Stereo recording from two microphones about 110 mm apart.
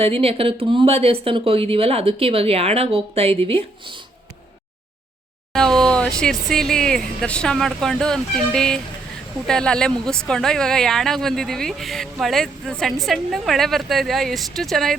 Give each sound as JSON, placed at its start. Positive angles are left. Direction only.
{"t": 0.0, "sound": "speech", "side_deg": -60}
{"t": 5.5, "sound": "speech", "side_deg": 5}